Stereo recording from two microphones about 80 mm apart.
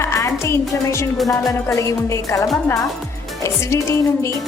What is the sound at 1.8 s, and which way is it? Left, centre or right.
Speech, left.